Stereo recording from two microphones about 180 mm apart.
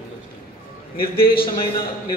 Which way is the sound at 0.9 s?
55° left (ahead or behind).